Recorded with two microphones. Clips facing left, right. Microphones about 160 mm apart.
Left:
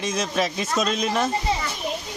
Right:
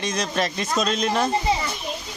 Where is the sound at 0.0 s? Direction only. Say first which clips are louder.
Even; 5° left (ahead or behind).